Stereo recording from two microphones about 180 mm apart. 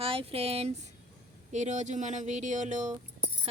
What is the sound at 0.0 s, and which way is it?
Speech, 30° right (ahead or behind).